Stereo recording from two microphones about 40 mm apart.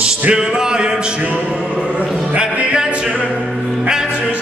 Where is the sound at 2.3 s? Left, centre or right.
Right.